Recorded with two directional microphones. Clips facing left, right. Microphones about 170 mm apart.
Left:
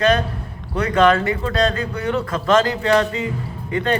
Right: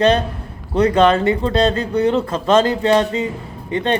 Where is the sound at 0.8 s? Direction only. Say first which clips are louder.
Right 3 dB; 30° right (ahead or behind).